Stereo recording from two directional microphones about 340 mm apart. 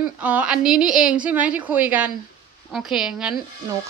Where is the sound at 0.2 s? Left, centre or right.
Centre.